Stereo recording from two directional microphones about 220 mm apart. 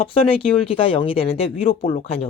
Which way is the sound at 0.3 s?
25° left (ahead or behind).